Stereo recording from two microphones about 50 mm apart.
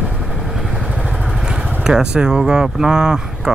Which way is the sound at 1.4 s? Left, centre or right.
Centre.